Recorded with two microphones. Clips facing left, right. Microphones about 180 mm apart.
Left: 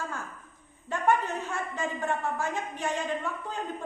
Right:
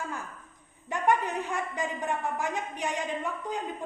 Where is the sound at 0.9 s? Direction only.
15° right (ahead or behind).